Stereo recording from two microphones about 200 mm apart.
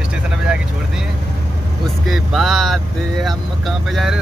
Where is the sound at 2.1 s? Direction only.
Centre (ahead or behind).